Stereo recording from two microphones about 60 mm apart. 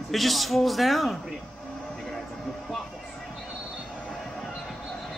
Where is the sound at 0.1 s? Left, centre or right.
Centre.